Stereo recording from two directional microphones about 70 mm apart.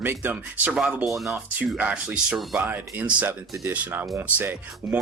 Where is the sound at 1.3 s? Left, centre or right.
Right.